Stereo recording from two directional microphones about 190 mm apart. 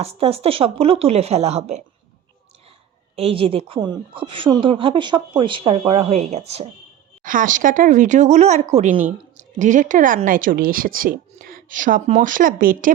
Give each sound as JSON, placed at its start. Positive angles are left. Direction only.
{"t": 0.0, "sound": "speech", "side_deg": -30}
{"t": 3.2, "sound": "a woman's voice", "side_deg": -30}
{"t": 7.2, "sound": "speech", "side_deg": -45}